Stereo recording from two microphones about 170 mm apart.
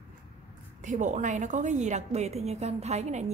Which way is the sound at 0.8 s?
45° right (ahead or behind).